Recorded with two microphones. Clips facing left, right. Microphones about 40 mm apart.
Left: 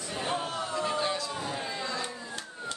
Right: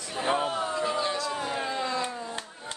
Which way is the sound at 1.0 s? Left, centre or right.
Centre.